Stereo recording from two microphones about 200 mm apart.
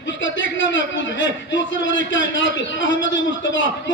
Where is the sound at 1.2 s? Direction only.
70° left (ahead or behind).